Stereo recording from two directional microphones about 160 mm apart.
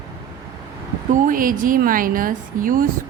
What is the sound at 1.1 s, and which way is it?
A woman's voice, 60° right (ahead or behind).